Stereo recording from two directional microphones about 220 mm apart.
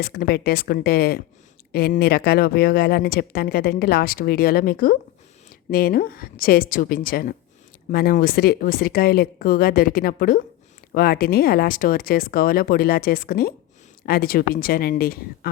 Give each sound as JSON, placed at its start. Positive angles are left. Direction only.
{"t": 0.0, "sound": "speech", "side_deg": 45}